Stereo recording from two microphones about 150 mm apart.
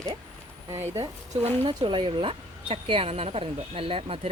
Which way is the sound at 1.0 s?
45° right (ahead or behind).